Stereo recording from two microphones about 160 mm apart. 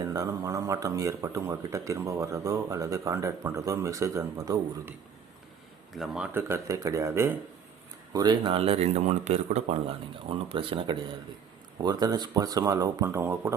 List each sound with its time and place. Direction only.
0.0 s speech: 20° right (ahead or behind)
5.9 s speech: 5° right (ahead or behind)
6.8 s speech: 20° right (ahead or behind); by 9.6 s 45° right (ahead or behind)
10.2 s speech: 35° right (ahead or behind); by 13.5 s 15° right (ahead or behind)